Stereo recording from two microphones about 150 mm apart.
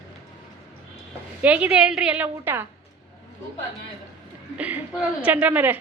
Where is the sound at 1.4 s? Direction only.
10° right (ahead or behind).